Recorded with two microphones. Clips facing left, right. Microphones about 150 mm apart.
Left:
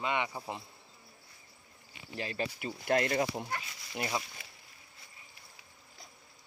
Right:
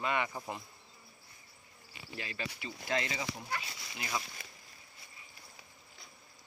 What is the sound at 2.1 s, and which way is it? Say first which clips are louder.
Speech: left 6 dB; 40° left (ahead or behind).